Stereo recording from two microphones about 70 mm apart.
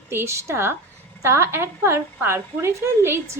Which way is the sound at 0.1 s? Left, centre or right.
Right.